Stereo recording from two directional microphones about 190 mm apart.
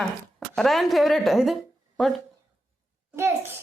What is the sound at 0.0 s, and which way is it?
A woman's voice, centre (ahead or behind).